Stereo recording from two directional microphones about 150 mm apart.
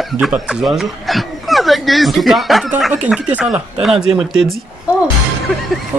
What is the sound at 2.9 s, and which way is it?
Speech, 10° right (ahead or behind).